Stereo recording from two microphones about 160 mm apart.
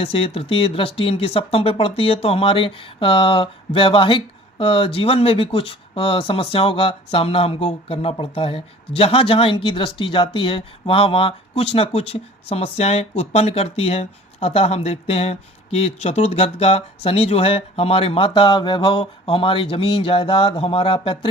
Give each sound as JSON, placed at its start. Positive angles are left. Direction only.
{"t": 0.0, "sound": "speech", "side_deg": 35}